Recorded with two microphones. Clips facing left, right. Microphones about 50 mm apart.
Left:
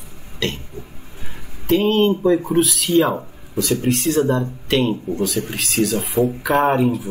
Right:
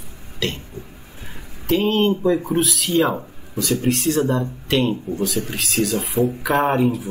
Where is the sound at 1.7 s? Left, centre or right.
Centre.